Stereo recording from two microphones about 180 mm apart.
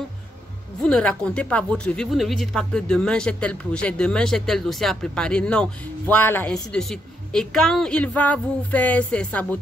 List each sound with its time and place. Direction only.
0.8 s speech: 5° left (ahead or behind)